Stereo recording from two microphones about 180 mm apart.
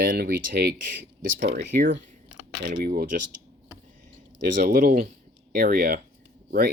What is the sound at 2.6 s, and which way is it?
Speech, 55° right (ahead or behind).